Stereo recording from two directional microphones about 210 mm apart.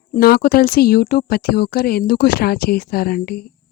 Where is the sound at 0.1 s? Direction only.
45° left (ahead or behind).